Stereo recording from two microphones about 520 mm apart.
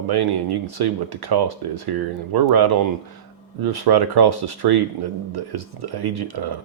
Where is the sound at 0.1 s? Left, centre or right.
Right.